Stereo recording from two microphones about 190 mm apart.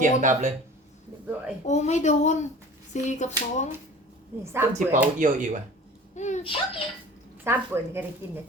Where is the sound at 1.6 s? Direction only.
35° left (ahead or behind).